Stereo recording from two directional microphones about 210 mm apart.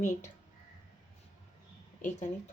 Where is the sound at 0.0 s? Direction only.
35° left (ahead or behind).